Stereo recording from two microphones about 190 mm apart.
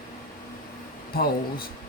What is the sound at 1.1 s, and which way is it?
Speech, 50° left (ahead or behind).